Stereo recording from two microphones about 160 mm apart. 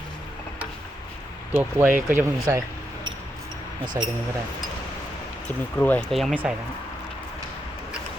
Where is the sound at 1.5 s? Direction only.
10° right (ahead or behind).